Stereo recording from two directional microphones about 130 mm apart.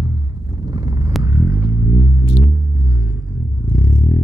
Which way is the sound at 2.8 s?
15° right (ahead or behind).